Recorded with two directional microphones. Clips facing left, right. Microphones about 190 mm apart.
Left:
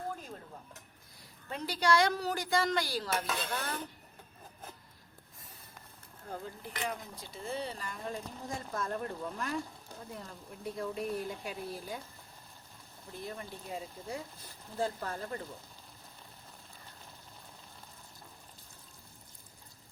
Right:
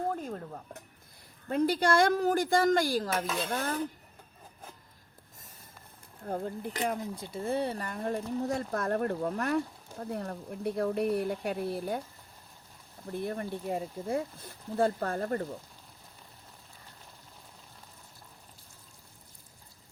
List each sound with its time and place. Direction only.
0.1 s speech: 55° right (ahead or behind)
3.2 s dishes: centre (ahead or behind)
3.5 s speech: 45° right (ahead or behind)
6.2 s speech: 45° right (ahead or behind)
13.1 s speech: 60° right (ahead or behind)